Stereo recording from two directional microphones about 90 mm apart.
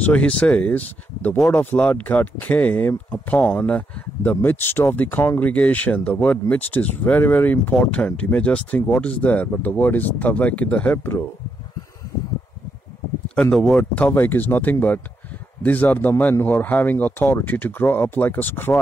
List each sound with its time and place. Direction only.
0.0 s speech: 15° left (ahead or behind)
13.3 s speech: 10° left (ahead or behind)